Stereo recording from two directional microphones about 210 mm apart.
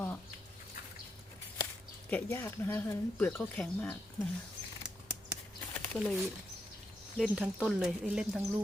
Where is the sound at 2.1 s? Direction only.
10° left (ahead or behind).